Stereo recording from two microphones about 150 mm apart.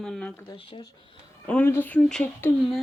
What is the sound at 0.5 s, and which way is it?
Speech, 35° left (ahead or behind).